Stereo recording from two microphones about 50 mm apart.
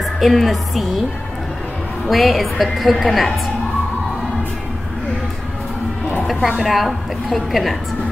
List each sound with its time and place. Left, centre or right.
0.0 s a woman's voice: centre
2.0 s a woman's voice: centre
6.6 s a woman's voice: centre